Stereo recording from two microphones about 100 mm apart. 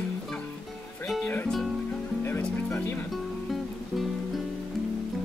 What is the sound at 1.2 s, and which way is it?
Music, 20° left (ahead or behind).